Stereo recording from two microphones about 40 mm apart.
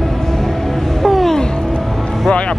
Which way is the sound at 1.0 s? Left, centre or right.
Centre.